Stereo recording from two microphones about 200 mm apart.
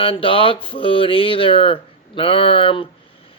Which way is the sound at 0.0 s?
25° left (ahead or behind).